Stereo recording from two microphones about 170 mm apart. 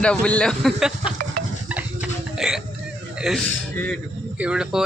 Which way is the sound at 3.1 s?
Centre (ahead or behind).